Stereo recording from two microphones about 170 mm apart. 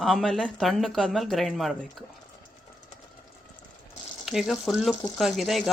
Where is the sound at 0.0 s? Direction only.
Centre (ahead or behind).